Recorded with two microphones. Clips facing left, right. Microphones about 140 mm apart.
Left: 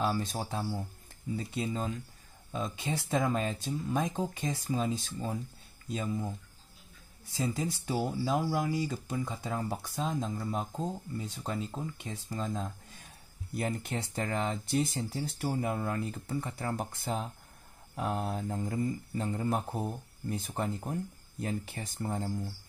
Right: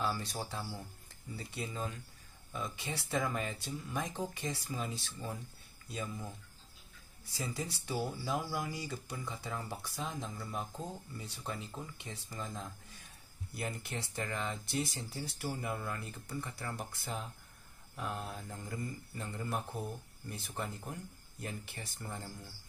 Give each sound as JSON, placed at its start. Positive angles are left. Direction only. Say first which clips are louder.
{"t": 0.0, "sound": "speech", "louder": "left 5 dB", "side_deg": 50}
{"t": 2.6, "sound": "speech", "louder": "left 6 dB", "side_deg": 50}
{"t": 7.3, "sound": "speech", "louder": "left 7 dB", "side_deg": 50}
{"t": 18.5, "sound": "speech", "louder": "left 9 dB", "side_deg": 40}